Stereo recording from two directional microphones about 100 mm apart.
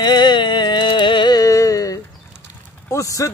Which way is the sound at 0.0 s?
50° left (ahead or behind).